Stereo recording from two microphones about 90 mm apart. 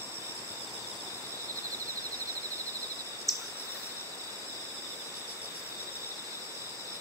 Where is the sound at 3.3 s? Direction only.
Centre (ahead or behind).